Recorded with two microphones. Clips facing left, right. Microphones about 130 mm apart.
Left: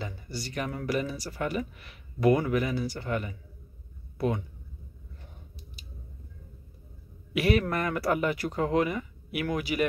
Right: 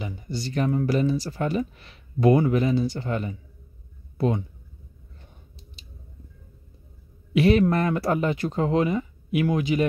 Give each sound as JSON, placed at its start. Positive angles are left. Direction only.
{"t": 0.0, "sound": "speech", "side_deg": -20}
{"t": 7.3, "sound": "speech", "side_deg": -25}